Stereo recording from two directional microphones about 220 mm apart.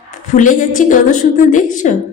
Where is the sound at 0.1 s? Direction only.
35° left (ahead or behind).